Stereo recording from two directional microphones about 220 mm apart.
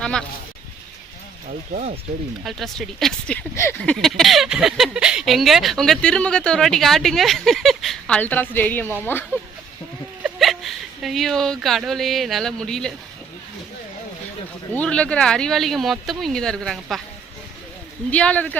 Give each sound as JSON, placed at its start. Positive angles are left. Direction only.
{"t": 0.0, "sound": "speech", "side_deg": 5}
{"t": 1.7, "sound": "speech", "side_deg": -30}
{"t": 2.4, "sound": "speech", "side_deg": 0}
{"t": 10.2, "sound": "speech", "side_deg": 0}
{"t": 14.7, "sound": "speech", "side_deg": 5}
{"t": 18.1, "sound": "speech", "side_deg": 5}